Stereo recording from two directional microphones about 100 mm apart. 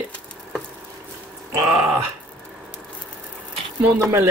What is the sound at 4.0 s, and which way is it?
Music, 25° right (ahead or behind).